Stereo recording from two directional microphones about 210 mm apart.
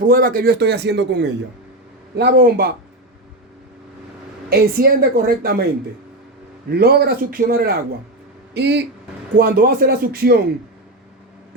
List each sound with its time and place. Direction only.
0.0 s a man's voice: 45° right (ahead or behind)
4.4 s a man's voice: 45° right (ahead or behind)
6.7 s a man's voice: 50° right (ahead or behind)